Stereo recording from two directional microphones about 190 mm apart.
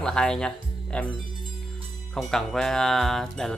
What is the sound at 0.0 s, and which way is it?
Speech, 5° left (ahead or behind).